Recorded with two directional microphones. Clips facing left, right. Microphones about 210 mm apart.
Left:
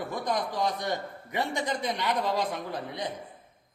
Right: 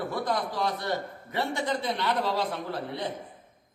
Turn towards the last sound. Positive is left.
turn(degrees=15)  # may be behind; listen again after turning